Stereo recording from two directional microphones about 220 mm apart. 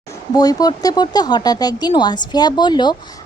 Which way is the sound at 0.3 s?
15° left (ahead or behind).